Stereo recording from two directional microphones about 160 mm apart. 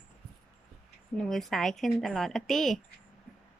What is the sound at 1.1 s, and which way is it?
Speech, centre (ahead or behind).